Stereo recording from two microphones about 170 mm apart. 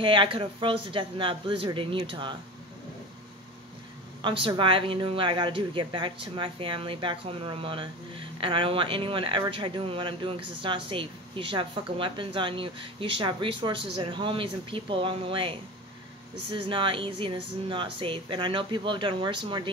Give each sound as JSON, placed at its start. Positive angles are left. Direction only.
{"t": 0.0, "sound": "speech", "side_deg": -30}
{"t": 4.2, "sound": "a woman's voice", "side_deg": -30}